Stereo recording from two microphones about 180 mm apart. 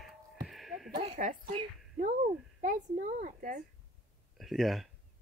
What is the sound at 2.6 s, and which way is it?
A woman's voice, 50° right (ahead or behind).